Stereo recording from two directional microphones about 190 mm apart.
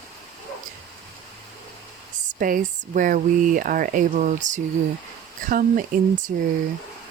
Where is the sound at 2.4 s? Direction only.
45° right (ahead or behind).